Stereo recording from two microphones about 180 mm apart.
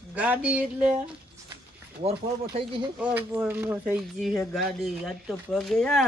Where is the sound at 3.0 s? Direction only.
10° right (ahead or behind).